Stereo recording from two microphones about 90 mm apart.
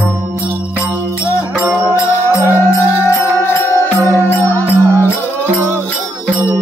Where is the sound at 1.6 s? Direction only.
15° right (ahead or behind).